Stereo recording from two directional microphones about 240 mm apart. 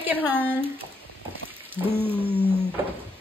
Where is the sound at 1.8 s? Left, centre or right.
Centre.